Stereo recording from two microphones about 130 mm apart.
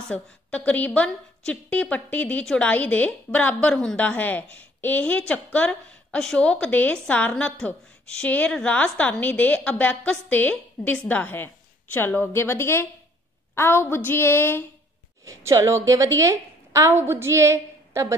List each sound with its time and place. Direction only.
0.1 s a woman's voice: 10° left (ahead or behind)
15.2 s a woman's voice: 20° right (ahead or behind)